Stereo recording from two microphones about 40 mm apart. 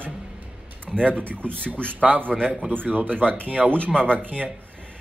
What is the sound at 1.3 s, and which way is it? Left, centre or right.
Speech, right.